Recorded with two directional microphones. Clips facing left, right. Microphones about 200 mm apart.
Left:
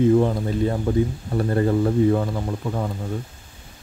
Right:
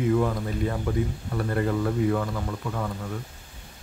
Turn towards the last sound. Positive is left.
turn(degrees=30)  # may be behind; listen again after turning